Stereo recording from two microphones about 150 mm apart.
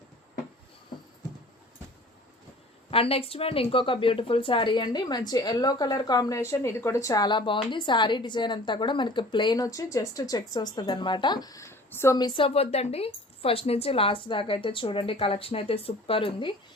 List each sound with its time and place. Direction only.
2.9 s a woman's voice: 40° left (ahead or behind); by 12.1 s 15° left (ahead or behind)
12.1 s a woman's voice: 30° left (ahead or behind)